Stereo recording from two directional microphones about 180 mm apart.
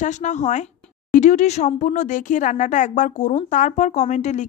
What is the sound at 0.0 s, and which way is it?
Speech, 40° left (ahead or behind).